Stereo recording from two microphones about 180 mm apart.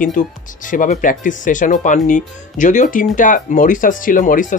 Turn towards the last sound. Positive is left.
turn(degrees=45)  # may be behind; listen again after turning